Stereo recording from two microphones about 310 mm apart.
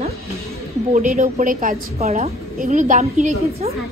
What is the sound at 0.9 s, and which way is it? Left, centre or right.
A woman's voice, right.